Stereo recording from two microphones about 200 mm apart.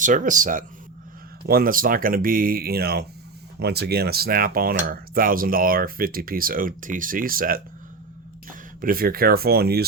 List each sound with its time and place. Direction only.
0.0 s speech: 40° right (ahead or behind)